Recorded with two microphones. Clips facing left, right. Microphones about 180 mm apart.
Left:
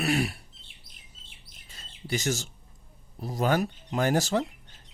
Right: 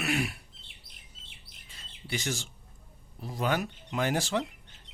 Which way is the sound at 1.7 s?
40° left (ahead or behind).